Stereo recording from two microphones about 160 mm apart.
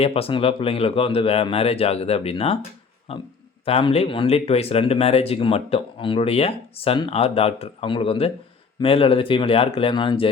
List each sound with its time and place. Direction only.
0.0 s speech: 35° left (ahead or behind)